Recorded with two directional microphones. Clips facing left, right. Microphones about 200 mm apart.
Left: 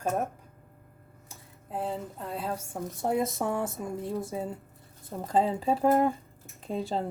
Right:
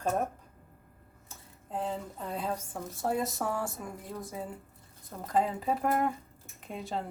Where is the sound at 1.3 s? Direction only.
5° left (ahead or behind).